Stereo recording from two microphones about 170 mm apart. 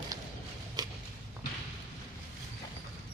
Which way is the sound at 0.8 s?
20° right (ahead or behind).